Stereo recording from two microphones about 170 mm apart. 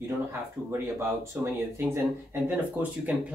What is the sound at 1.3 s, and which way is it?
Speech, 10° right (ahead or behind).